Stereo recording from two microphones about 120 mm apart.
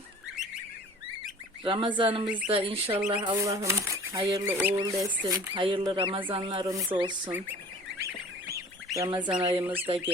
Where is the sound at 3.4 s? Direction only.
25° right (ahead or behind).